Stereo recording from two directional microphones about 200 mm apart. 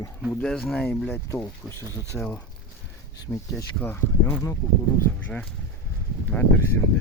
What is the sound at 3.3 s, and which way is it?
Speech, 15° left (ahead or behind).